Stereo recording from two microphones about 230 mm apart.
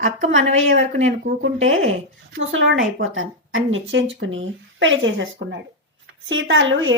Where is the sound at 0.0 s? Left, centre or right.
Right.